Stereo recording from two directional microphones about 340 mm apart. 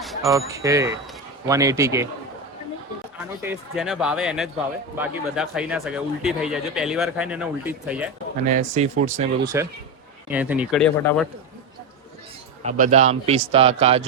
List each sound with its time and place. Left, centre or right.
0.0 s a man's voice: centre
3.4 s speech: centre
8.4 s speech: right
10.2 s speech: centre
12.6 s a man's voice: right